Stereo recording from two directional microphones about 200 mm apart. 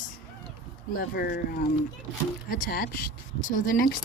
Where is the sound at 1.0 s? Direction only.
50° left (ahead or behind).